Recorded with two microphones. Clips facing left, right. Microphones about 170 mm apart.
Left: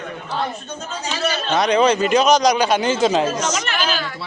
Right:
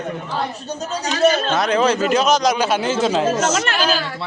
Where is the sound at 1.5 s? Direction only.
5° right (ahead or behind).